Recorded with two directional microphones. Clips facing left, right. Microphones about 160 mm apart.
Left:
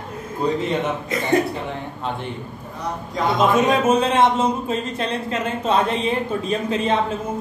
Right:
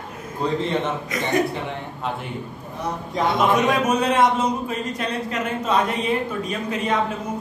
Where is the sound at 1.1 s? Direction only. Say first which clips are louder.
Left 2 dB; 30° left (ahead or behind).